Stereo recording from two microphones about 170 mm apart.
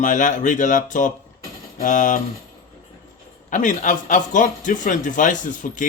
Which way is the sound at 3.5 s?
45° left (ahead or behind).